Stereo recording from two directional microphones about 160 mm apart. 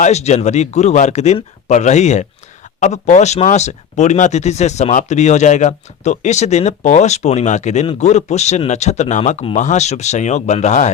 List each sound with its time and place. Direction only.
0.0 s speech: 45° left (ahead or behind)